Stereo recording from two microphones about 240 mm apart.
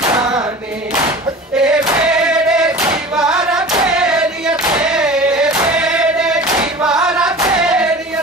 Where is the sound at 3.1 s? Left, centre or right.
Centre.